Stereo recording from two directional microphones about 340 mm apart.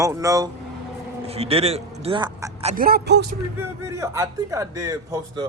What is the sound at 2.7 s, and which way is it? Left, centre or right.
Speech, right.